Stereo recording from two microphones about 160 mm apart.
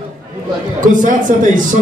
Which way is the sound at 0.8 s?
55° right (ahead or behind).